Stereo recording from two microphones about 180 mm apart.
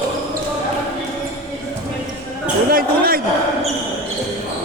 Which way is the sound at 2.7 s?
55° right (ahead or behind).